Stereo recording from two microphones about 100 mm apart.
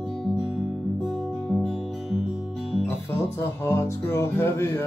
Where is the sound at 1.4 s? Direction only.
10° left (ahead or behind).